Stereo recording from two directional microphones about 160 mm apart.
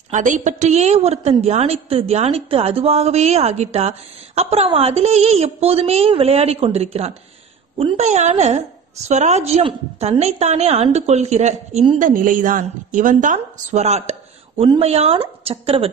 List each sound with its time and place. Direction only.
0.1 s a woman's voice: 50° right (ahead or behind)
12.0 s a woman's voice: 60° right (ahead or behind); by 15.9 s 35° right (ahead or behind)